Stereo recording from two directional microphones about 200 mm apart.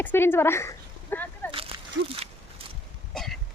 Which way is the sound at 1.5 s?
25° right (ahead or behind).